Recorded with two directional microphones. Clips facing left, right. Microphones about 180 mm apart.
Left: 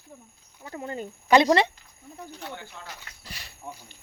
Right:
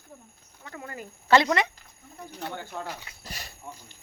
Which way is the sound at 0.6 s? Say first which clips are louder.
Left 6 dB; 25° left (ahead or behind).